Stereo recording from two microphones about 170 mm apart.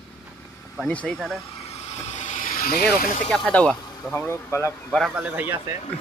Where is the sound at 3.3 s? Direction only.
5° left (ahead or behind).